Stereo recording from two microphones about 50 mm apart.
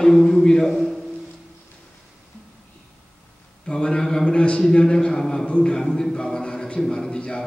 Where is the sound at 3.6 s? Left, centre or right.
Centre.